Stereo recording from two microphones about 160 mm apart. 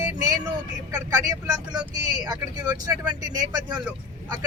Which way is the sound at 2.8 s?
25° right (ahead or behind).